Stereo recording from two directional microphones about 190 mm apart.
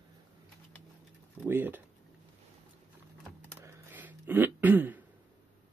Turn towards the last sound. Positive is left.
turn(degrees=-10)  # may be behind; listen again after turning